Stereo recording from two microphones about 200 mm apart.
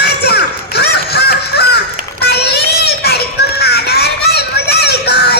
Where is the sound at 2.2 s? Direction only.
55° left (ahead or behind).